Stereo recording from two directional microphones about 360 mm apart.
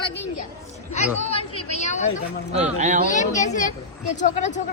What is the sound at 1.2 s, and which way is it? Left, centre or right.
Chatter, centre.